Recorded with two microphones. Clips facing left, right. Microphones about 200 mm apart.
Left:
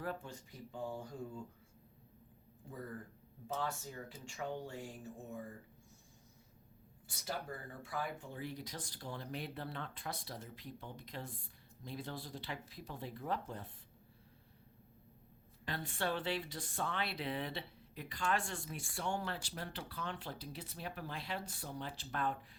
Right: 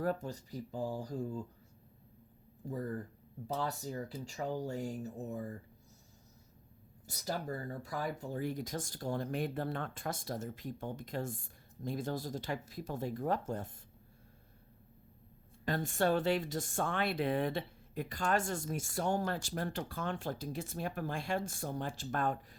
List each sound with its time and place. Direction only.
0.0 s speech: 40° right (ahead or behind)
2.6 s speech: 40° right (ahead or behind)
7.1 s speech: 40° right (ahead or behind)
15.6 s speech: 45° right (ahead or behind)